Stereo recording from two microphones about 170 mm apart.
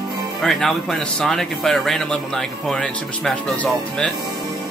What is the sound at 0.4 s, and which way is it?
Speech, 5° left (ahead or behind).